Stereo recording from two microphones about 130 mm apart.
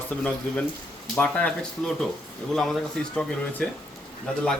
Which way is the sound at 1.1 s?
10° left (ahead or behind).